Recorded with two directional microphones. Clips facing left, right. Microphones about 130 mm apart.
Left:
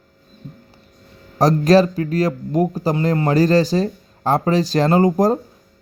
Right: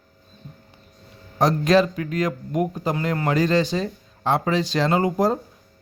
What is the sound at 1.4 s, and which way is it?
A man's voice, 40° left (ahead or behind).